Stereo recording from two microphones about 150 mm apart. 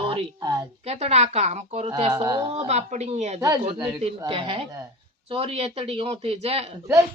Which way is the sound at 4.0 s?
35° right (ahead or behind).